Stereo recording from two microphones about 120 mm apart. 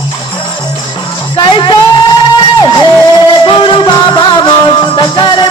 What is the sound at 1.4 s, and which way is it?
Music, 40° left (ahead or behind).